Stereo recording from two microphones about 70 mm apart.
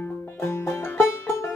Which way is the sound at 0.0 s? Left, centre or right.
Left.